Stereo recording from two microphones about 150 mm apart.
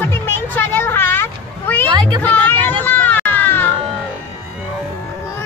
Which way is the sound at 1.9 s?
30° right (ahead or behind).